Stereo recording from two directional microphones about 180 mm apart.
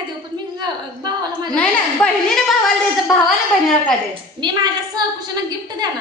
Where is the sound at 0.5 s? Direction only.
25° right (ahead or behind).